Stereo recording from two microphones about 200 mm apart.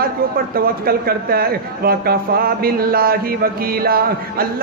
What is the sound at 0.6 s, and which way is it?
A man's voice, 50° right (ahead or behind).